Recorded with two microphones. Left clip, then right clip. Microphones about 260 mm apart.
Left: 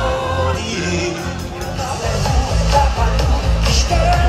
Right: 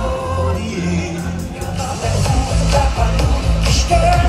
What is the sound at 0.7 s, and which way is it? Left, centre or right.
Music, right.